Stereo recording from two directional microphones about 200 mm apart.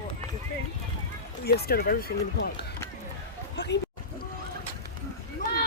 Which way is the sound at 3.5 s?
60° left (ahead or behind).